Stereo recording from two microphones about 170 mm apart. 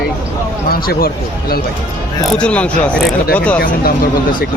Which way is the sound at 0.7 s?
60° left (ahead or behind).